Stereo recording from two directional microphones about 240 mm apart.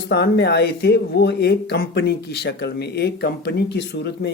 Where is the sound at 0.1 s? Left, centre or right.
Left.